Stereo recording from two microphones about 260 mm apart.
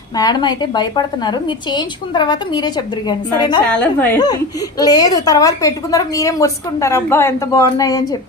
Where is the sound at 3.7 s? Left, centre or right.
Centre.